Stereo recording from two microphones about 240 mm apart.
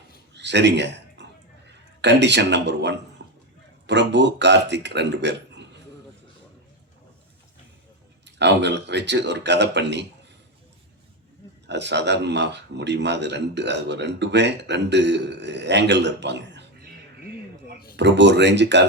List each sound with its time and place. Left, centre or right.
0.3 s a sound: right
3.8 s speech: right
8.4 s speech: right
11.6 s speech: right
17.9 s speech: right